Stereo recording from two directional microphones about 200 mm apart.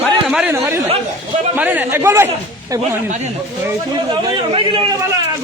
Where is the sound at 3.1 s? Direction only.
35° right (ahead or behind).